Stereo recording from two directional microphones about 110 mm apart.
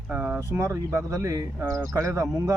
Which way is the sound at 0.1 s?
20° right (ahead or behind).